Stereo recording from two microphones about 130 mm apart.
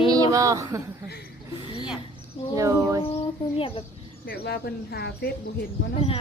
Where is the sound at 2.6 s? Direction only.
20° right (ahead or behind).